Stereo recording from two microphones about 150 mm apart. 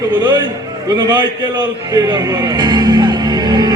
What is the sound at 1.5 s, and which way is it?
Speech, 25° right (ahead or behind).